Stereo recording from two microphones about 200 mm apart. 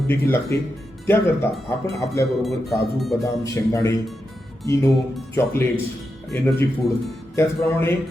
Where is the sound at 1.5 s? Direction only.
Centre (ahead or behind).